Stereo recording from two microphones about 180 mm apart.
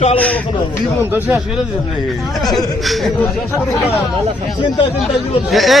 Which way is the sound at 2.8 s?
Centre (ahead or behind).